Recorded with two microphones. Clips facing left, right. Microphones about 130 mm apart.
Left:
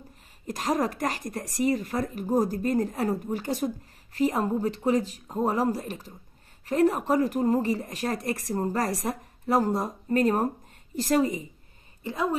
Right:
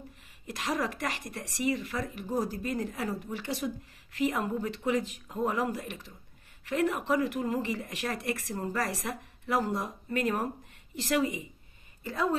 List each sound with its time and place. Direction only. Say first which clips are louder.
0.5 s a woman's voice: left 5 dB; 40° left (ahead or behind)
12.0 s a woman's voice: left 2 dB; 20° left (ahead or behind)